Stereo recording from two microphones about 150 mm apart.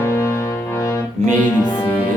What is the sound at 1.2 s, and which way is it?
Music, 50° right (ahead or behind).